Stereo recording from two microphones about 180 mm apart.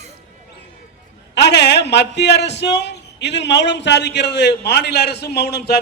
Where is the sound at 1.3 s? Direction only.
70° left (ahead or behind).